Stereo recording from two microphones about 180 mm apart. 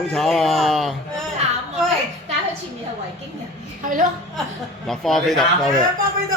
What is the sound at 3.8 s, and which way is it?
Speech, 50° right (ahead or behind).